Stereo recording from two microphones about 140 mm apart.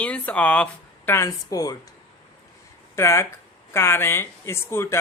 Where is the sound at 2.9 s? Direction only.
20° left (ahead or behind).